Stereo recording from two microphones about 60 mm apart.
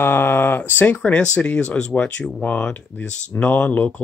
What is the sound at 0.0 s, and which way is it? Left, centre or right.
Speech, left.